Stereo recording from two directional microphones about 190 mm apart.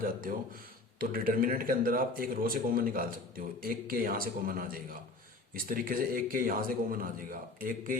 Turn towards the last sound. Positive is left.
turn(degrees=-50)  # may be behind; listen again after turning